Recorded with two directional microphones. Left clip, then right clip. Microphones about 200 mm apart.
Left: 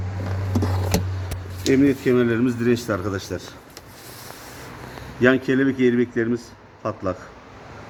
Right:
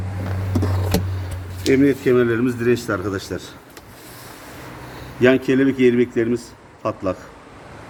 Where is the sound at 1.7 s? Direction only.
55° left (ahead or behind).